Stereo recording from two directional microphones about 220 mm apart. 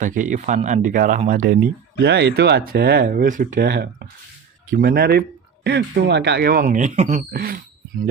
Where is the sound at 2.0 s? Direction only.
50° right (ahead or behind); by 7.2 s 30° right (ahead or behind).